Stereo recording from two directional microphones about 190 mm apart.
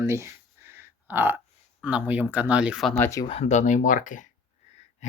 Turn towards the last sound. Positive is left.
turn(degrees=35)  # may be behind; listen again after turning